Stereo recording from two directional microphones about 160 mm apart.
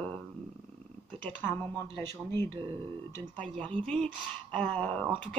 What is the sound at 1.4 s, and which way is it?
A woman's voice, 15° left (ahead or behind).